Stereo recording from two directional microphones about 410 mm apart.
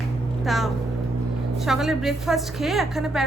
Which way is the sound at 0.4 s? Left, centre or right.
Centre.